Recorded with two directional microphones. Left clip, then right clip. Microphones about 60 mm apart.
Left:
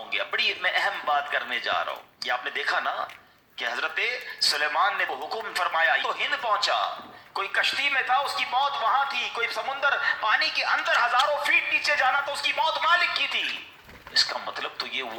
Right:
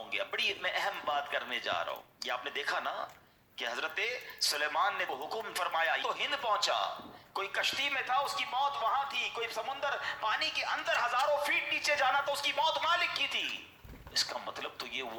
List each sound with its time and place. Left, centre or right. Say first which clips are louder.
0.1 s a man's voice: left 8 dB; centre; by 6.9 s right
7.3 s a man's voice: left 8 dB; centre
8.4 s a man's voice: left 7 dB; left
9.9 s a woman's voice: left 11 dB; left
10.9 s a man's voice: left 6 dB; centre
11.5 s a woman's voice: left 8 dB; right
12.4 s a woman's voice: left 7 dB; right
12.6 s a man's voice: left 9 dB; centre